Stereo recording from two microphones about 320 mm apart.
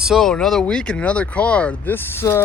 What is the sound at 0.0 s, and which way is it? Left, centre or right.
Speech, centre.